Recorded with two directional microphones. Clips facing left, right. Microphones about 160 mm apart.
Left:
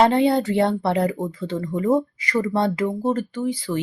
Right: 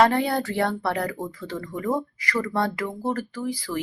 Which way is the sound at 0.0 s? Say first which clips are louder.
Left 4 dB; 20° left (ahead or behind).